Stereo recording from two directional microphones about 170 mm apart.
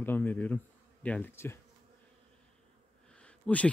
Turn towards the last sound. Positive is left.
turn(degrees=10)  # may be behind; listen again after turning